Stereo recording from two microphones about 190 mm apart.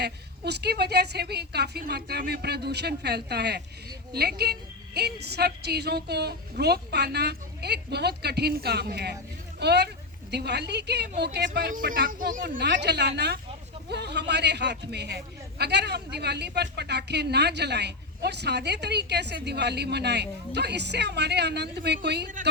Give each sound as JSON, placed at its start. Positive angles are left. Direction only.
{"t": 0.0, "sound": "a man's voice", "side_deg": -60}